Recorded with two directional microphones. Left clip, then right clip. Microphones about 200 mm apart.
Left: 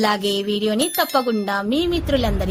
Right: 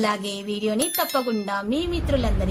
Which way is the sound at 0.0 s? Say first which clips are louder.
Left 6 dB; 30° left (ahead or behind).